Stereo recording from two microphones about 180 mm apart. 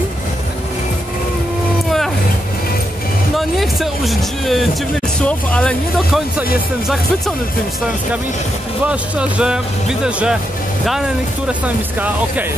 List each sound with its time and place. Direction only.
3.3 s a sound: centre (ahead or behind)
5.2 s speech: 5° left (ahead or behind)
8.8 s speech: 5° right (ahead or behind)